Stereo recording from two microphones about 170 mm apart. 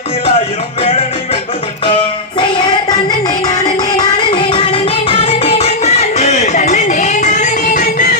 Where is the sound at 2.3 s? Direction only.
25° left (ahead or behind).